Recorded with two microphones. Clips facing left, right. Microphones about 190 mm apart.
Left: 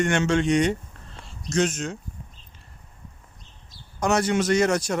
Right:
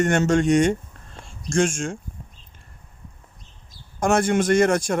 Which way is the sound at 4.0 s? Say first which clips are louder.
Right 3 dB; 50° right (ahead or behind).